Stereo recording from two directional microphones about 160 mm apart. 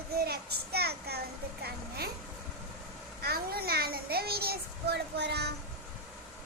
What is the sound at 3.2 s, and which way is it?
A child's voice, 75° right (ahead or behind).